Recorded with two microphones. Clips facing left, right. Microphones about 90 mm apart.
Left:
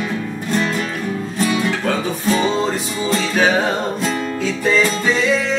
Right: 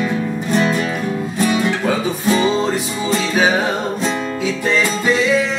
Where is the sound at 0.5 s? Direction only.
5° right (ahead or behind).